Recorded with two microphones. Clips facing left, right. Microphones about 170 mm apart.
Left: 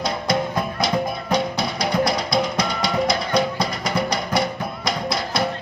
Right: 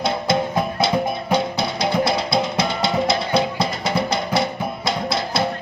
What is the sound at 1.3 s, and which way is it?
Music, 25° right (ahead or behind).